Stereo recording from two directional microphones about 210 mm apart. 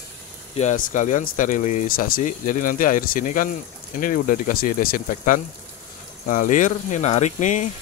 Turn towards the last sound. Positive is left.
turn(degrees=35)  # may be behind; listen again after turning